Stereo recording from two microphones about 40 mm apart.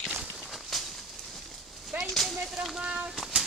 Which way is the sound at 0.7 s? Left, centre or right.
Centre.